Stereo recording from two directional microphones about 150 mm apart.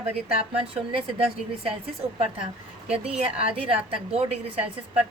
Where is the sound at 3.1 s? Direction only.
40° right (ahead or behind).